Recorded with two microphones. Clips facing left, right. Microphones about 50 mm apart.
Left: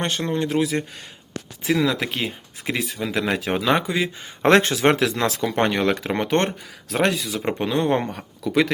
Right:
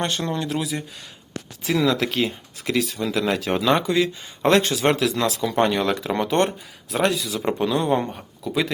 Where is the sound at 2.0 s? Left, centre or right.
Left.